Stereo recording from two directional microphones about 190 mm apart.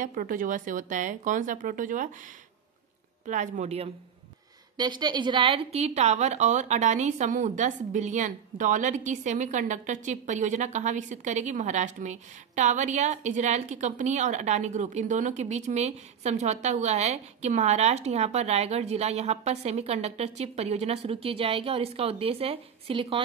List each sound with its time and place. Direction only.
0.0 s speech: 45° right (ahead or behind)
3.3 s a woman's voice: 40° right (ahead or behind)
4.7 s a woman's voice: 25° right (ahead or behind)